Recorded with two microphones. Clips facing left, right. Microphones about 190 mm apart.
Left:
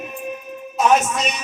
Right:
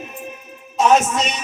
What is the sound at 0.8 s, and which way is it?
Music, 25° right (ahead or behind).